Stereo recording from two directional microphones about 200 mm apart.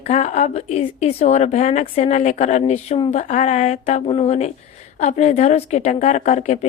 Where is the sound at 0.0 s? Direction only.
35° left (ahead or behind).